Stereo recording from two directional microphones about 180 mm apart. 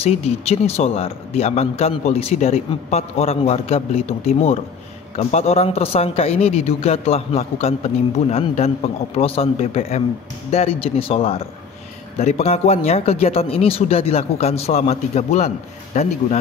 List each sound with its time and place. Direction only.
0.0 s a man's voice: 35° left (ahead or behind)